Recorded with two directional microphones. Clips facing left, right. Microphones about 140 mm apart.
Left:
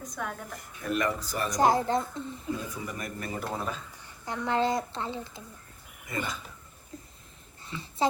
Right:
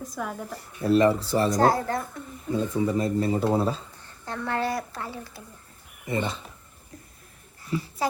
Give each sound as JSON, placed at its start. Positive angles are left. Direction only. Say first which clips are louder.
{"t": 0.0, "sound": "a woman's voice", "louder": "right 4 dB", "side_deg": -5}
{"t": 0.5, "sound": "speech", "louder": "right 11 dB", "side_deg": -35}
{"t": 1.5, "sound": "speech", "louder": "left 3 dB", "side_deg": 15}
{"t": 2.6, "sound": "speech", "louder": "right 12 dB", "side_deg": -25}
{"t": 3.9, "sound": "speech", "louder": "right 1 dB", "side_deg": 15}
{"t": 6.1, "sound": "speech", "louder": "right 6 dB", "side_deg": -30}
{"t": 7.6, "sound": "a sound", "louder": "right 7 dB", "side_deg": 25}